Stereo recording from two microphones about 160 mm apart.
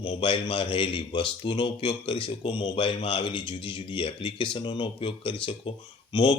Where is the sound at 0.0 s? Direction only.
30° left (ahead or behind).